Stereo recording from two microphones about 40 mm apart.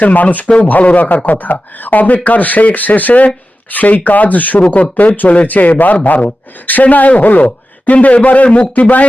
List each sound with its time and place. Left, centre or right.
0.0 s speech: left
0.4 s speech: left
0.7 s speech: left